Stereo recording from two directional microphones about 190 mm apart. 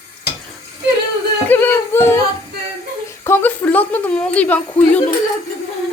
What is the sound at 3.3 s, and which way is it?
A woman's voice, 10° left (ahead or behind).